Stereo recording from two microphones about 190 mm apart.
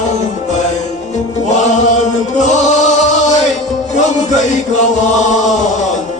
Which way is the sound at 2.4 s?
40° left (ahead or behind).